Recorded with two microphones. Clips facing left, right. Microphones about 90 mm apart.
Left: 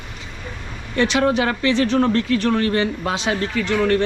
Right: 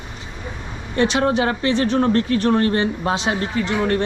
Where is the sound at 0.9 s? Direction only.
25° right (ahead or behind).